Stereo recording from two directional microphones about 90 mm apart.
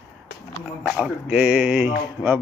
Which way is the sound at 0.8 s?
5° right (ahead or behind).